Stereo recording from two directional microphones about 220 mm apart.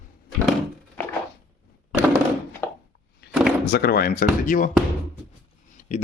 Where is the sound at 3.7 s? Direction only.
45° left (ahead or behind).